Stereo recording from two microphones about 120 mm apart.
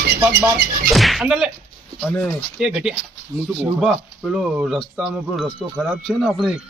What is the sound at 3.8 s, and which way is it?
Speech, 5° right (ahead or behind).